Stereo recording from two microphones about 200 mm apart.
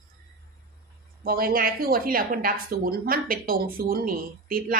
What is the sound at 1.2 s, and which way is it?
A woman's voice, 50° right (ahead or behind).